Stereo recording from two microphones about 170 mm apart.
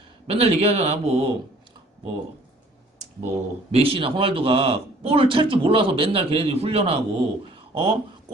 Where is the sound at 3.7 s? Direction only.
35° right (ahead or behind).